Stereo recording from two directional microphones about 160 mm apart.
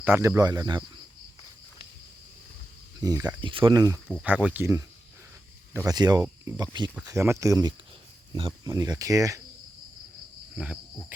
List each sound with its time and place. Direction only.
0.0 s speech: 15° right (ahead or behind)
3.0 s speech: 25° right (ahead or behind)
4.2 s speech: 5° right (ahead or behind)
5.7 s speech: 25° right (ahead or behind)
10.5 s cricket: 5° right (ahead or behind)